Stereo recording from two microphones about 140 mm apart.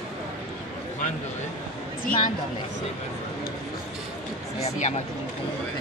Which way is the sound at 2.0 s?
70° left (ahead or behind).